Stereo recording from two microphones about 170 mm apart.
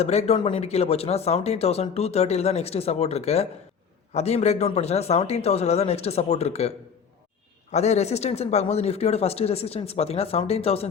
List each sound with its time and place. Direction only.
0.0 s speech: 40° left (ahead or behind)
0.3 s speech: 25° left (ahead or behind)
0.6 s speech: 40° left (ahead or behind)